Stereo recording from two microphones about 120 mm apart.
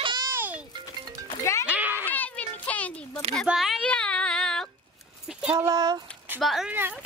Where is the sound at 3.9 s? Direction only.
10° left (ahead or behind).